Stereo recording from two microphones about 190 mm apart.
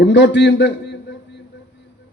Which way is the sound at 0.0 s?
70° left (ahead or behind).